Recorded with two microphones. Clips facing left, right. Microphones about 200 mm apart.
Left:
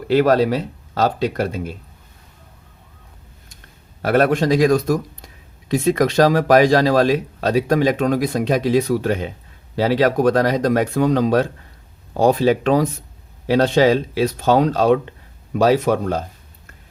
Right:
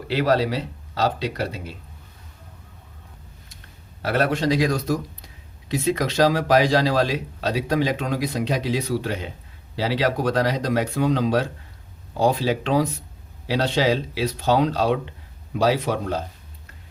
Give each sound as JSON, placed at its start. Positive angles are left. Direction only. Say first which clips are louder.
{"t": 0.1, "sound": "speech", "louder": "left 6 dB", "side_deg": 50}
{"t": 4.0, "sound": "speech", "louder": "left 5 dB", "side_deg": 50}